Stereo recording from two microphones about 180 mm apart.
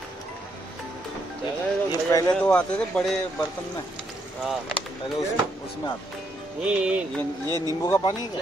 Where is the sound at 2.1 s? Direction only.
20° left (ahead or behind).